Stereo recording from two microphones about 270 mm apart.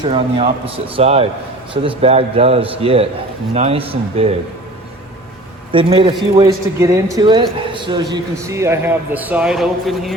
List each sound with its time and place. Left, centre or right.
0.0 s a man's voice: centre
5.7 s a man's voice: centre